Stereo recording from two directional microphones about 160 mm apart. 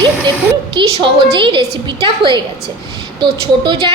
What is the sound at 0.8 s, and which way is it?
A woman's voice, 30° right (ahead or behind).